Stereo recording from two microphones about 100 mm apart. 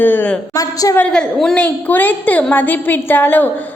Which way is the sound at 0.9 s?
10° left (ahead or behind).